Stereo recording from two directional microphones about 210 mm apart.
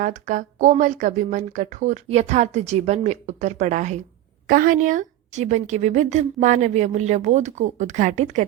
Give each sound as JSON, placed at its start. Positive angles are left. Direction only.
{"t": 0.0, "sound": "a woman's voice", "side_deg": -35}